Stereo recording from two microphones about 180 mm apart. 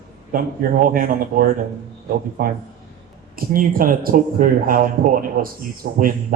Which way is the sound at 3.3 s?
50° right (ahead or behind).